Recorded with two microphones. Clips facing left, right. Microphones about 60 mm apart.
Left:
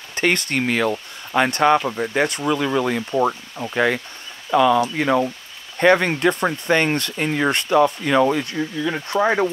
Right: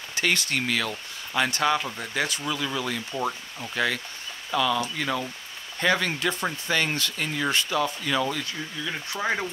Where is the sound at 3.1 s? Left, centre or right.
Left.